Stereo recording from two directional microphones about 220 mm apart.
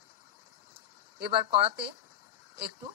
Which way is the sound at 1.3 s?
25° right (ahead or behind).